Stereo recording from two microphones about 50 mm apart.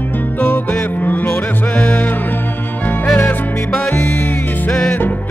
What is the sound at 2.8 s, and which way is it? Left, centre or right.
Music, left.